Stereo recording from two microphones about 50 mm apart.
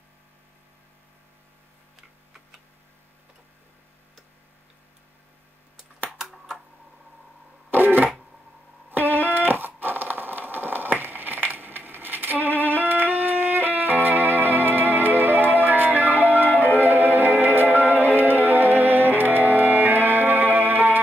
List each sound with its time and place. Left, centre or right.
6.1 s typing: centre
7.7 s a sound: right
14.0 s music: right